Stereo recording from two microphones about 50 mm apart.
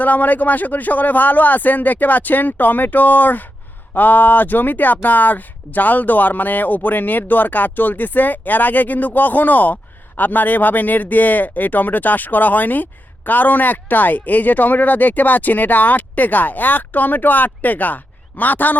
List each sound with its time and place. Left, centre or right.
0.0 s speech: left